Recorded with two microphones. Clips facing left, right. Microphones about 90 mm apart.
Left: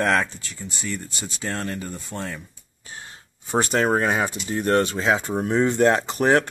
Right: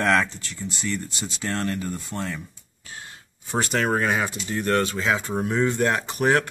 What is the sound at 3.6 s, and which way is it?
Speech, 30° left (ahead or behind).